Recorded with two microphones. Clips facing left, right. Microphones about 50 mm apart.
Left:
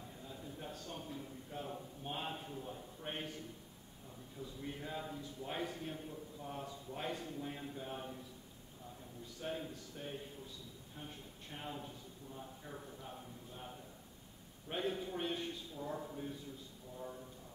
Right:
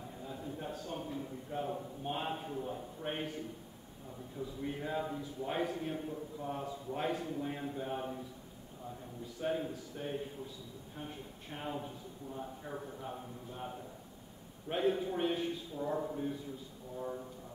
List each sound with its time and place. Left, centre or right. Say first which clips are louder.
0.2 s a sound: right 7 dB; centre
2.0 s a man's voice: right 5 dB; centre
9.4 s a man's voice: right 7 dB; centre
15.8 s a man's voice: right 8 dB; right